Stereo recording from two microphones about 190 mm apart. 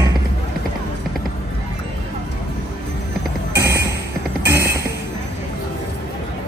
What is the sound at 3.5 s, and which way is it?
Music, 15° right (ahead or behind).